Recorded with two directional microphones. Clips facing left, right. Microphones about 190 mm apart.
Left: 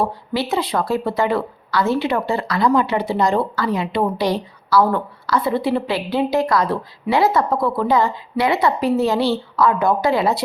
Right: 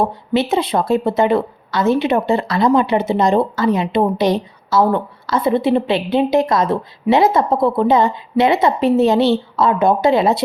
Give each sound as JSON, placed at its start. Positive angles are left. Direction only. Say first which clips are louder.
{"t": 0.0, "sound": "a woman's voice", "louder": "right 4 dB", "side_deg": -20}